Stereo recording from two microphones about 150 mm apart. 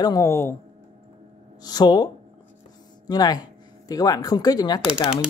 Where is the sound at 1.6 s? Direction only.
25° left (ahead or behind).